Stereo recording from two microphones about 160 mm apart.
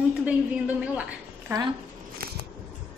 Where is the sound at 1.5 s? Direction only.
15° right (ahead or behind).